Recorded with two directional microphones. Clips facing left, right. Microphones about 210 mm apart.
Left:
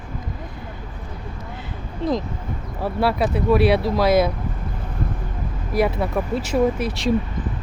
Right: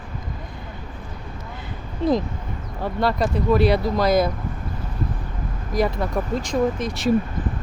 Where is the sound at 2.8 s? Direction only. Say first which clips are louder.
Left 1 dB; 5° left (ahead or behind).